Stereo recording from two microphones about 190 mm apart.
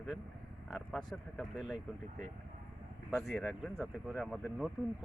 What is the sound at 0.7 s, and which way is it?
Speech, centre (ahead or behind).